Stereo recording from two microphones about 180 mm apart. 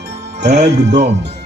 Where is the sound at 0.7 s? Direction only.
70° right (ahead or behind).